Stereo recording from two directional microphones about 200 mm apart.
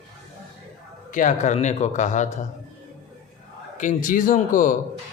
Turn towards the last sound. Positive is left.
turn(degrees=40)  # may be behind; listen again after turning